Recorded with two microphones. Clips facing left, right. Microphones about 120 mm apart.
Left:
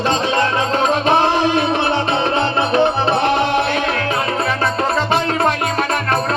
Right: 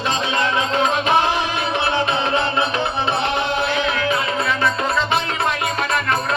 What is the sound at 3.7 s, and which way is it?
Music, 45° left (ahead or behind).